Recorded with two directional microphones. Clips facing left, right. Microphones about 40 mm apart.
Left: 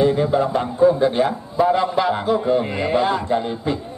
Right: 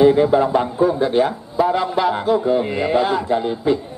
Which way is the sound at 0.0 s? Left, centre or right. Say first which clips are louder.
Right 4 dB; centre.